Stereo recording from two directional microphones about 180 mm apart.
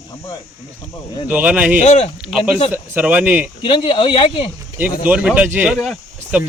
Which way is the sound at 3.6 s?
30° left (ahead or behind).